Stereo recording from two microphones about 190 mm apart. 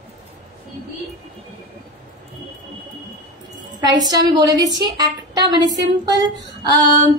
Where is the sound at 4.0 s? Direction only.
20° right (ahead or behind).